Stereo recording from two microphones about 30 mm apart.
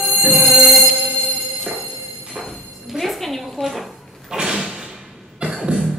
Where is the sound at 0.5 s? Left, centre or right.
Centre.